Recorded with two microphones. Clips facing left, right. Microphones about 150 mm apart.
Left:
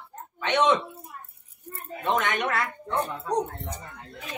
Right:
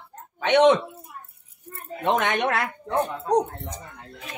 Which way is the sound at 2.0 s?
65° right (ahead or behind).